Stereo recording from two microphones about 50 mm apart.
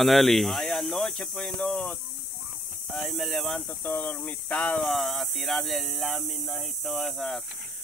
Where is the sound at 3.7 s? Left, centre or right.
Left.